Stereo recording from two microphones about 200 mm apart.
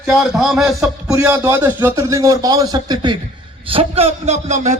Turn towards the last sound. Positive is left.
turn(degrees=-35)  # may be behind; listen again after turning